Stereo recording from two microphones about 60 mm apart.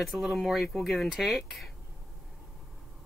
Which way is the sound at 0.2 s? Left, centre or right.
Centre.